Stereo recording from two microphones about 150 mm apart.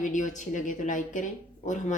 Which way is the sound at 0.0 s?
60° left (ahead or behind).